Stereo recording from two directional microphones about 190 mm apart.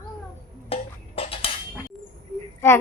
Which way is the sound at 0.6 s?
30° left (ahead or behind).